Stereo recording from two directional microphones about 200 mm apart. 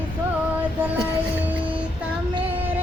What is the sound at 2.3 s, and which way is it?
Music, 25° right (ahead or behind).